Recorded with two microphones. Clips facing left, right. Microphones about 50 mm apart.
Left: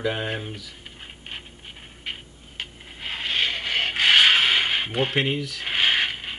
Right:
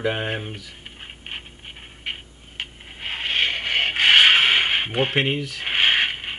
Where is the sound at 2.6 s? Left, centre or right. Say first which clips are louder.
Right 2 dB; right.